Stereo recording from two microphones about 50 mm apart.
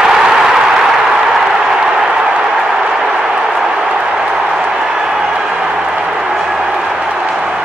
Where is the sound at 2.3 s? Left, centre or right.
Right.